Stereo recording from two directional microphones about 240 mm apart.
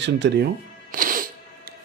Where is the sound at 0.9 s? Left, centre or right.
Right.